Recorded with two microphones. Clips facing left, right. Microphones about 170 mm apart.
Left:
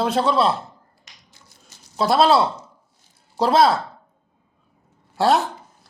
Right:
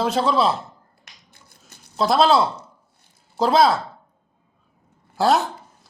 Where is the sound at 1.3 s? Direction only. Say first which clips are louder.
Right 1 dB; 55° right (ahead or behind).